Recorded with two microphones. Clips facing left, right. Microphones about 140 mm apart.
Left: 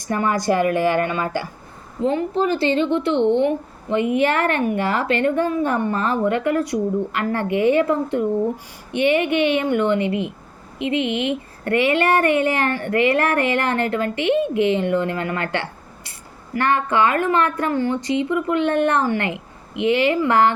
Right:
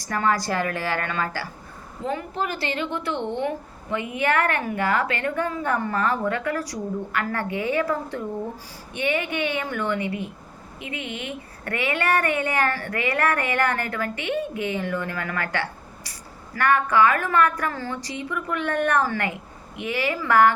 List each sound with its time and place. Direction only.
0.0 s a woman's voice: 20° left (ahead or behind)
2.0 s a woman's voice: 30° left (ahead or behind)